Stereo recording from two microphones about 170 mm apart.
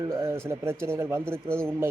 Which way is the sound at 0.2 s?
15° right (ahead or behind).